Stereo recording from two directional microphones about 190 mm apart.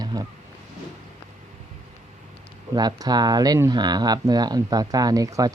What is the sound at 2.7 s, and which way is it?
Speech, 20° right (ahead or behind).